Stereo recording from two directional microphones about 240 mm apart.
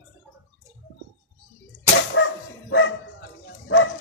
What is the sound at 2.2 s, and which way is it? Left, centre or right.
Dog, left.